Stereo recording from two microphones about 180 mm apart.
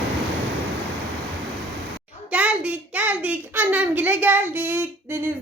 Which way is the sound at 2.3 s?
5° right (ahead or behind).